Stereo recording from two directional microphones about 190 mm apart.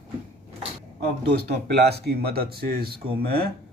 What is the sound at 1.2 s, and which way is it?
Speech, 60° right (ahead or behind).